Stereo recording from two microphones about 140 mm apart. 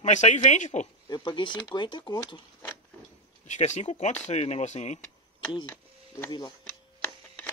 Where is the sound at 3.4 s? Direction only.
55° left (ahead or behind).